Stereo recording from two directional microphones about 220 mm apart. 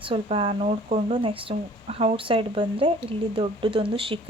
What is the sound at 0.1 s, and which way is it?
Speech, 25° right (ahead or behind).